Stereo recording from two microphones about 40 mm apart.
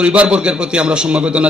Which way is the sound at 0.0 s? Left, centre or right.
Right.